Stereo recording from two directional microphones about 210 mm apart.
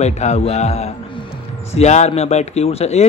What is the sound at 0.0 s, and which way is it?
A man's voice, 30° left (ahead or behind).